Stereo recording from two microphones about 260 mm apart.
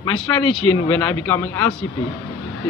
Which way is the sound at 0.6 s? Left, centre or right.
Left.